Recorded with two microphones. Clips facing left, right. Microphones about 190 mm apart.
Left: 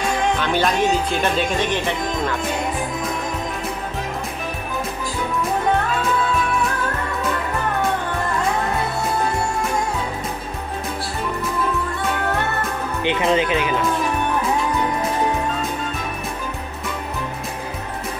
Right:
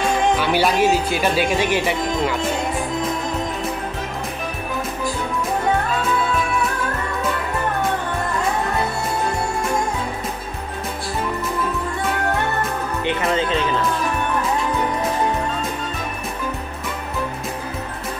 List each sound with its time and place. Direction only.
0.4 s speech: 10° right (ahead or behind)
13.0 s speech: 20° left (ahead or behind)